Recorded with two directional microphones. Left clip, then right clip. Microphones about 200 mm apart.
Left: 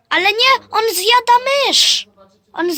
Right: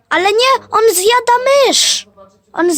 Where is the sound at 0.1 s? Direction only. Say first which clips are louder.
Right 2 dB; 45° right (ahead or behind).